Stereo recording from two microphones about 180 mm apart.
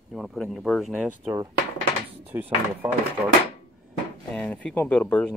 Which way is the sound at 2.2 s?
10° right (ahead or behind).